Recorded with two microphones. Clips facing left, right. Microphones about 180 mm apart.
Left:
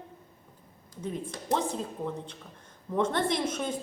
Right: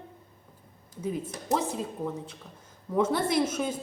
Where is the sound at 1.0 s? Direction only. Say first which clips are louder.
Right 3 dB; 5° right (ahead or behind).